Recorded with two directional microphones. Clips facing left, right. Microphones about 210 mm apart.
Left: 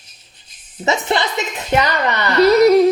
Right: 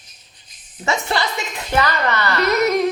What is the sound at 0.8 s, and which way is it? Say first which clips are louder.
A woman's voice: left 3 dB; 20° left (ahead or behind).